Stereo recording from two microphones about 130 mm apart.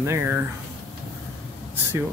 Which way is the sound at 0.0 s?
20° right (ahead or behind).